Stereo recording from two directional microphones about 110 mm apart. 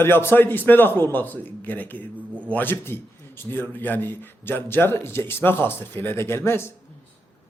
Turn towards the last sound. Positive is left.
turn(degrees=25)  # may be behind; listen again after turning